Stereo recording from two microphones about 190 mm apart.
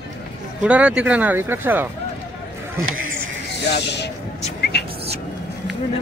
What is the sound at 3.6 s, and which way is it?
Speech, 60° left (ahead or behind).